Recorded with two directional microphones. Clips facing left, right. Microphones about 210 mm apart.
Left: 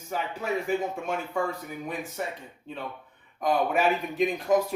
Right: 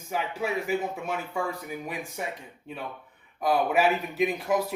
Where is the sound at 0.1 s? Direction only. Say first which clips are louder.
Even; 10° right (ahead or behind).